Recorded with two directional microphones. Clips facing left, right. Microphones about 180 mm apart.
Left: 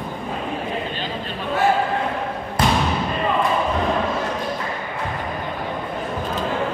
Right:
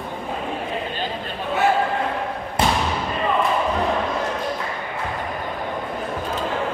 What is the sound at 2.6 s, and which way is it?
Basketball bounce, 25° right (ahead or behind).